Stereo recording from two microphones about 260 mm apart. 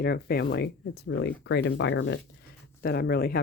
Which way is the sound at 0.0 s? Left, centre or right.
Left.